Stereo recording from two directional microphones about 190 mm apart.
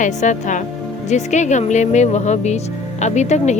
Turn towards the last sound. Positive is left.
turn(degrees=35)  # may be behind; listen again after turning